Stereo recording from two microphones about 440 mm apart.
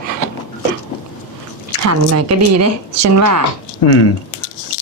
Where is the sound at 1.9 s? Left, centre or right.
Right.